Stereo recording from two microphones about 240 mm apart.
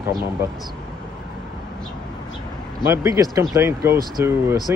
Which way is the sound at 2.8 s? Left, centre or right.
Centre.